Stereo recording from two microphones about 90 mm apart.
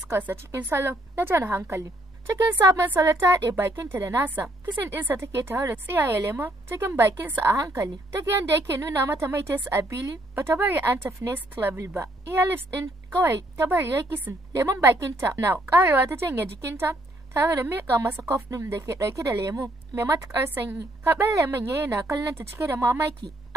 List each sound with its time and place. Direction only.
0.2 s a woman's voice: 25° right (ahead or behind); by 20.1 s 40° right (ahead or behind)
21.0 s a woman's voice: 30° right (ahead or behind)